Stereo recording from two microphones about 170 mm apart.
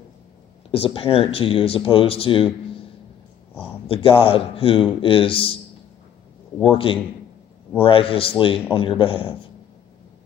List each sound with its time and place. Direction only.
0.7 s speech: 30° left (ahead or behind)
3.8 s speech: 30° left (ahead or behind)
6.6 s speech: 30° left (ahead or behind)